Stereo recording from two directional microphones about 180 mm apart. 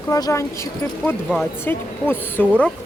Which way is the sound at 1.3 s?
Centre (ahead or behind).